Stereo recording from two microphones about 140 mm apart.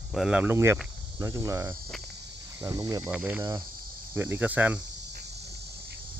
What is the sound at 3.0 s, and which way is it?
Speech, 10° right (ahead or behind).